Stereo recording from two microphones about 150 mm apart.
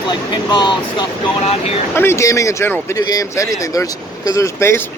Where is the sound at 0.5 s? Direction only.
30° left (ahead or behind).